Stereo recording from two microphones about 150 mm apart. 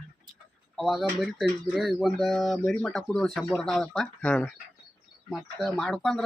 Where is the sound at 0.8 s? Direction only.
Centre (ahead or behind).